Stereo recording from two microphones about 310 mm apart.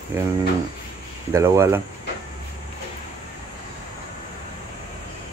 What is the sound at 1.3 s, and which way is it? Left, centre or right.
Speech, centre.